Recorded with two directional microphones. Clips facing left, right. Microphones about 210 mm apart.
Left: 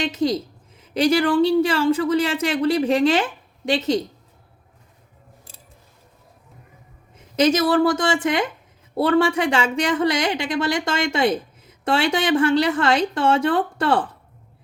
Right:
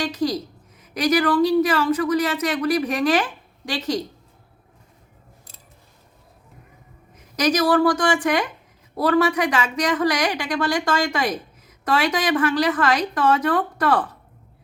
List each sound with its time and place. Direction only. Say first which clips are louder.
0.0 s a woman's voice: left 2 dB; 25° left (ahead or behind)
7.2 s a woman's voice: left 2 dB; 25° left (ahead or behind)